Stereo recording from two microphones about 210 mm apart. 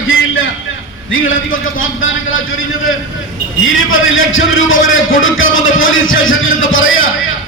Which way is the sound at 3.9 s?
70° left (ahead or behind).